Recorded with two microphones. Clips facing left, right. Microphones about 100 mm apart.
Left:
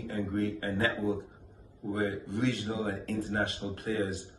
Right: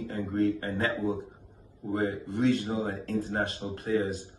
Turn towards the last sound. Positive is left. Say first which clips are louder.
# right 4 dB
turn(degrees=-35)  # may be behind; listen again after turning